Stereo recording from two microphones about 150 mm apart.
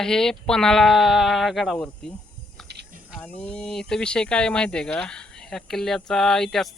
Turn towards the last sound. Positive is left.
turn(degrees=5)  # may be behind; listen again after turning